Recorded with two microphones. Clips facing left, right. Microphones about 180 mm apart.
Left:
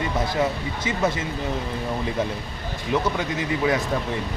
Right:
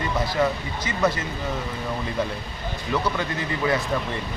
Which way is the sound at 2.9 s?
25° left (ahead or behind).